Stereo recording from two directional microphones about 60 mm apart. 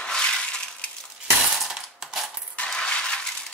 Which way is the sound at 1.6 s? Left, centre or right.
Centre.